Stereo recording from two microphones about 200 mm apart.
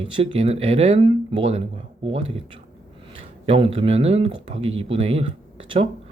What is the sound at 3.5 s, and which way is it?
Speech, 30° right (ahead or behind).